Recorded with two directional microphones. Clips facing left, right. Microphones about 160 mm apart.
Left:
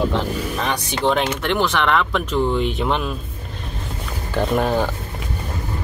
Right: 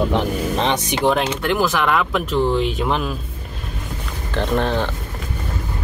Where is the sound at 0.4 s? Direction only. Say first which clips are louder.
Right 4 dB; 25° right (ahead or behind).